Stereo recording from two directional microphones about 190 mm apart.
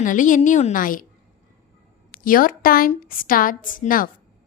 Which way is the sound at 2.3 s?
45° left (ahead or behind).